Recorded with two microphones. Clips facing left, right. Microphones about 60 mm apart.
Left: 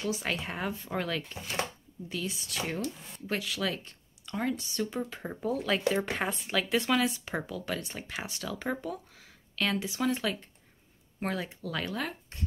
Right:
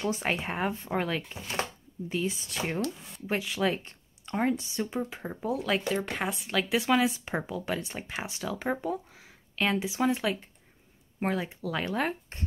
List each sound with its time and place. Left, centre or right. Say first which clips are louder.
0.0 s speech: right 3 dB; right
4.6 s speech: right 1 dB; centre
5.2 s speech: right 1 dB; centre
10.1 s speech: right 2 dB; centre
11.9 s speech: right 5 dB; right